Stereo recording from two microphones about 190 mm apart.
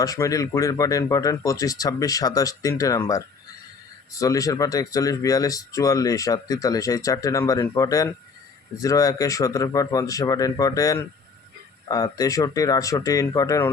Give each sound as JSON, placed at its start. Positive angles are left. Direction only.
{"t": 0.0, "sound": "speech", "side_deg": 20}